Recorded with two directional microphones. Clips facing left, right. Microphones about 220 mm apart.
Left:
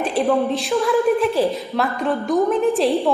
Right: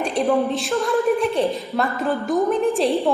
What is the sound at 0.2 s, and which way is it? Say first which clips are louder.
A woman's voice: left 1 dB; centre (ahead or behind).